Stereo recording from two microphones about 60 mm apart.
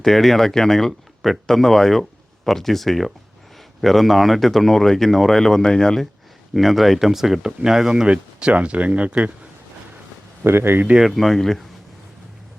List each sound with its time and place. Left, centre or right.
0.0 s speech: centre
8.0 s speech: centre
10.4 s speech: right
11.0 s speech: centre